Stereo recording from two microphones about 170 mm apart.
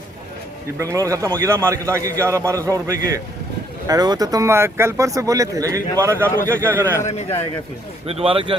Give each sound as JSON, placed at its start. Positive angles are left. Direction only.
{"t": 0.8, "sound": "a man's voice", "side_deg": -20}
{"t": 8.0, "sound": "a man's voice", "side_deg": -35}